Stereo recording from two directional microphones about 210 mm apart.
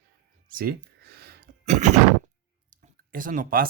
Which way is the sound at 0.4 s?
45° right (ahead or behind).